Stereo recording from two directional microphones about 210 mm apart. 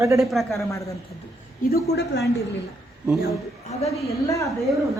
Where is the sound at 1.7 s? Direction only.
50° left (ahead or behind).